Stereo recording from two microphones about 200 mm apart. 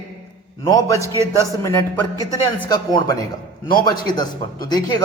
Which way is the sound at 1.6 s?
15° left (ahead or behind).